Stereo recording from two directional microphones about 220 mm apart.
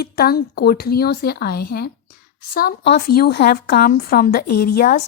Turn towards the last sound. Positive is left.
turn(degrees=40)  # may be behind; listen again after turning